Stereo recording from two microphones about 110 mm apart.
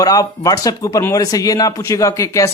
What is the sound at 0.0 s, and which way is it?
Speech, 35° left (ahead or behind).